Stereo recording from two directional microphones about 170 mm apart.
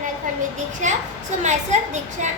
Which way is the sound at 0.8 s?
45° right (ahead or behind).